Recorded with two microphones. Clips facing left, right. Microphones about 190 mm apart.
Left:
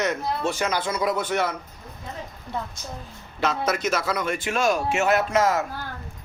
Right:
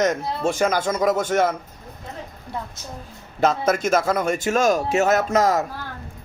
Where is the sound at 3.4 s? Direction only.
45° right (ahead or behind).